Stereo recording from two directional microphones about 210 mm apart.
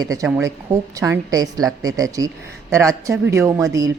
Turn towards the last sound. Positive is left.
turn(degrees=-15)  # may be behind; listen again after turning